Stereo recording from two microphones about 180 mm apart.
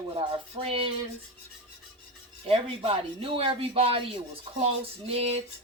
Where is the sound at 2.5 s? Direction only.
30° right (ahead or behind).